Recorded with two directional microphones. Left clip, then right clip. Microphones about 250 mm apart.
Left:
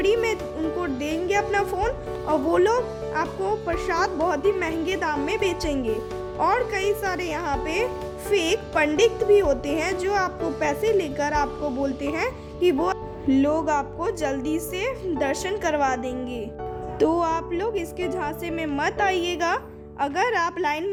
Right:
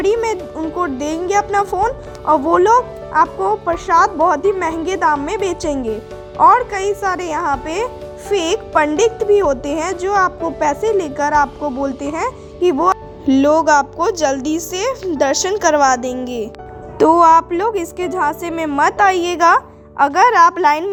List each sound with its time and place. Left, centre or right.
0.0 s music: centre
0.8 s a woman's voice: centre